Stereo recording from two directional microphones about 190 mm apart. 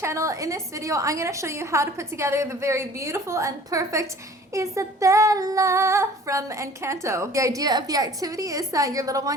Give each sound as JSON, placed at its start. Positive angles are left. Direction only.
{"t": 0.0, "sound": "female singing", "side_deg": -15}